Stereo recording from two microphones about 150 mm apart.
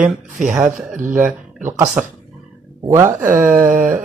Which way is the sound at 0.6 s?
10° right (ahead or behind).